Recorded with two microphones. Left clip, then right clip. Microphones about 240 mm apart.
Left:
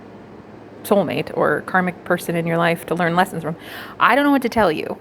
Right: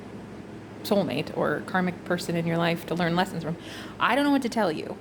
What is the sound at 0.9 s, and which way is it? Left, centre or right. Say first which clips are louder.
A woman's voice: left 8 dB; centre.